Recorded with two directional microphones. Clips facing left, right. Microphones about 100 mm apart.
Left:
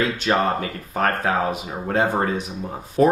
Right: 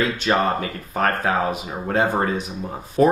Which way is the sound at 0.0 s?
15° right (ahead or behind).